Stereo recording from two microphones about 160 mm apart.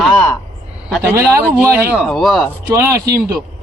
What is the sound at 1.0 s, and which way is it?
Speech, 15° right (ahead or behind).